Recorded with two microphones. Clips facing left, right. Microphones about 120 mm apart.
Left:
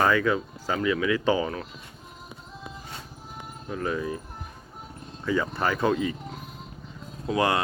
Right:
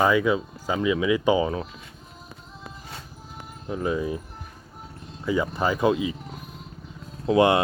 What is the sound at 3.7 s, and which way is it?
Speech, 20° right (ahead or behind).